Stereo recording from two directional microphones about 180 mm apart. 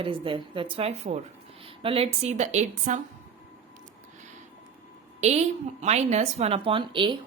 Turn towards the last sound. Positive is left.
turn(degrees=-25)  # may be behind; listen again after turning